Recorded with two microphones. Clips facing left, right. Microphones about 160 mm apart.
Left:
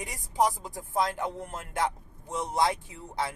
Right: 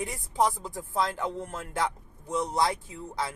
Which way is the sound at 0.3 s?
10° left (ahead or behind).